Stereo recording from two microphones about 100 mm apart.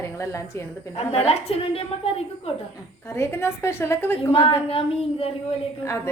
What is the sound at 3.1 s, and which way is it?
A woman's voice, 25° left (ahead or behind).